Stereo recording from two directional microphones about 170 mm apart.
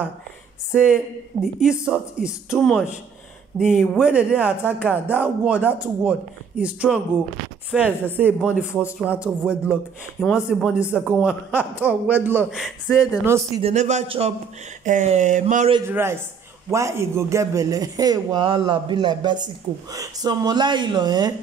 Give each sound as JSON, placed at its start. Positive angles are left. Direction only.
{"t": 0.7, "sound": "speech", "side_deg": -5}
{"t": 13.2, "sound": "speech", "side_deg": -15}
{"t": 13.6, "sound": "speech", "side_deg": -40}
{"t": 14.9, "sound": "a sound", "side_deg": -45}
{"t": 15.9, "sound": "a man's voice", "side_deg": -15}